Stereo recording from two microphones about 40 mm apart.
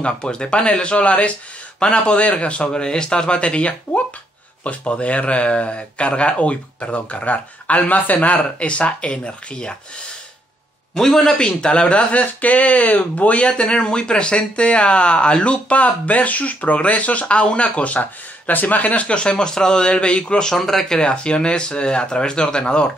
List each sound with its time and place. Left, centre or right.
0.0 s speech: left
11.0 s a man's voice: centre
11.3 s speech: left
12.2 s speech: left
18.5 s speech: left
20.4 s speech: centre